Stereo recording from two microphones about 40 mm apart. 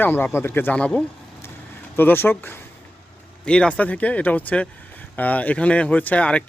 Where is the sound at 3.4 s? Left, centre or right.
Left.